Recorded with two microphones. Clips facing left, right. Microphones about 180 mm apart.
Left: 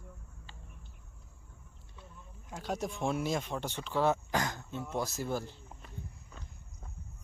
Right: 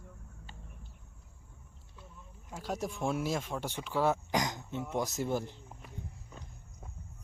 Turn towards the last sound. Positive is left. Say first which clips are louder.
# right 2 dB
turn(degrees=-15)  # may be behind; listen again after turning